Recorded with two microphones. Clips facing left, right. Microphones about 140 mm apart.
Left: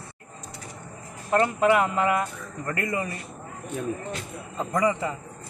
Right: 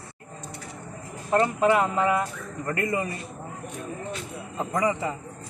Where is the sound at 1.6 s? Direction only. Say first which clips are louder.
Even; 25° right (ahead or behind).